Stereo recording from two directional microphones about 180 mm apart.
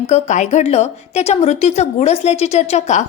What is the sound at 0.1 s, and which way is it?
A woman's voice, 40° left (ahead or behind).